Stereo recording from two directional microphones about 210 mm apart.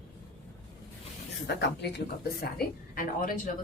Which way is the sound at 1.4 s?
55° left (ahead or behind).